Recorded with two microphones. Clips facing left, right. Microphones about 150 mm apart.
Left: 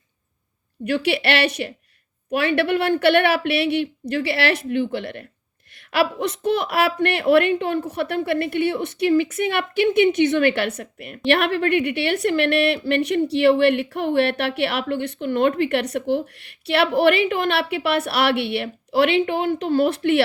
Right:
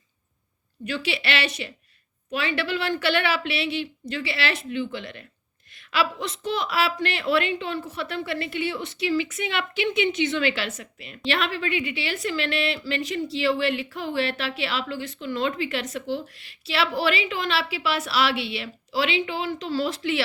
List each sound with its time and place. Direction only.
0.9 s a woman's voice: 65° left (ahead or behind)